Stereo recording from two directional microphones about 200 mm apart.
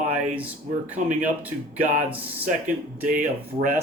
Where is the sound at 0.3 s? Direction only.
5° right (ahead or behind).